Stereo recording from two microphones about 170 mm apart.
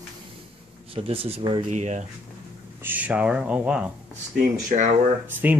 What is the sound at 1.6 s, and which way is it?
Speech, 45° right (ahead or behind).